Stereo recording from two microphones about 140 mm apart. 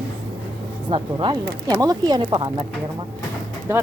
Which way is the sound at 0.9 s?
35° right (ahead or behind).